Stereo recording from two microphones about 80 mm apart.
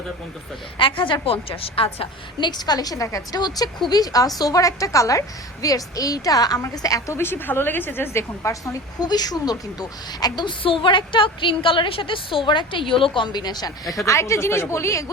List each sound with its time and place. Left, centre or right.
0.8 s a woman's voice: left
2.4 s a woman's voice: left
7.2 s a woman's voice: left
9.0 s a woman's voice: left
14.0 s speech: left